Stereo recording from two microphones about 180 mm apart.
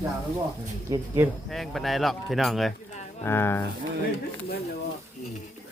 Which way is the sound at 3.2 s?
10° left (ahead or behind).